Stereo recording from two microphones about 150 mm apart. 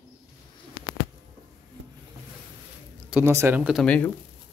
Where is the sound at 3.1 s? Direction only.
15° right (ahead or behind).